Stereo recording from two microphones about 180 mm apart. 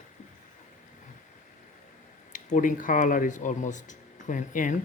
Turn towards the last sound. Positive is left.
turn(degrees=45)  # may be behind; listen again after turning